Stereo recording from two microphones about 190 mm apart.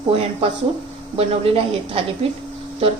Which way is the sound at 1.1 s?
30° right (ahead or behind).